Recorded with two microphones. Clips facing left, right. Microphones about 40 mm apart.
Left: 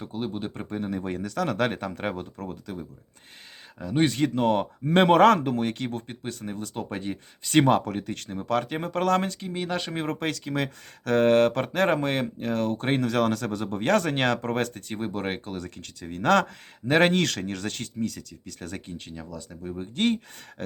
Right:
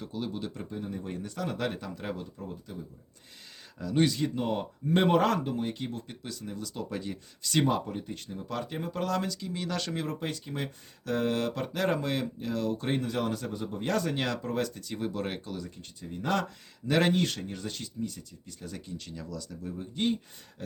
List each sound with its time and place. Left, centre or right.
0.0 s speech: left
0.7 s speech: left
3.8 s speech: left
4.1 s speech: left
6.0 s speech: left
7.6 s speech: left
9.9 s speech: left
10.2 s speech: left
13.0 s speech: left
15.6 s speech: left
16.8 s speech: left
17.1 s speech: left
18.9 s speech: left